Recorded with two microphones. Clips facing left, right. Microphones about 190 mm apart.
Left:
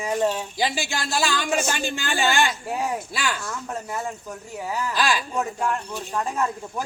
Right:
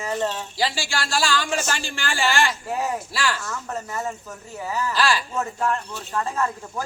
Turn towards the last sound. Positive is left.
turn(degrees=15)  # may be behind; listen again after turning